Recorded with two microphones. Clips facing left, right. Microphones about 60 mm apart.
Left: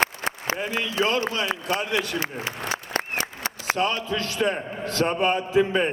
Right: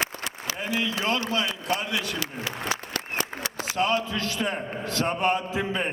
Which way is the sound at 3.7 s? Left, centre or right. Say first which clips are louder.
Left 1 dB; left.